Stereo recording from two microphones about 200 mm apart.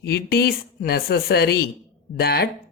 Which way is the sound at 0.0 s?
50° left (ahead or behind).